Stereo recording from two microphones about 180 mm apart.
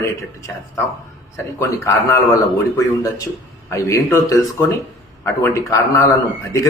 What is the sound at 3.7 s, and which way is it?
A man's voice, 15° left (ahead or behind).